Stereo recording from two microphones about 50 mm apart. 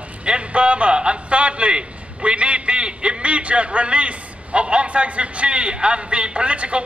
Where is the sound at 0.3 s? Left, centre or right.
Right.